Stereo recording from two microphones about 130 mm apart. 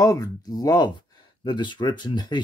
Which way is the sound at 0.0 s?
30° left (ahead or behind).